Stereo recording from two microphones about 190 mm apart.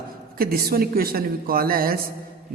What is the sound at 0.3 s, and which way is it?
A man's voice, 50° right (ahead or behind).